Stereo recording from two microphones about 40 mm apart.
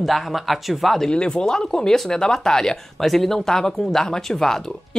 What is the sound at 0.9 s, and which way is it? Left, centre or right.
Speech, centre.